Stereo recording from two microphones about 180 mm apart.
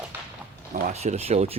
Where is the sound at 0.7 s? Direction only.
40° right (ahead or behind).